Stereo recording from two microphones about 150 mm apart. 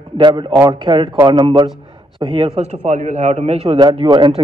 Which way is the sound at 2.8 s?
55° right (ahead or behind).